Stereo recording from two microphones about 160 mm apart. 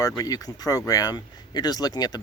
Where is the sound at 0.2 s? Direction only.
20° left (ahead or behind).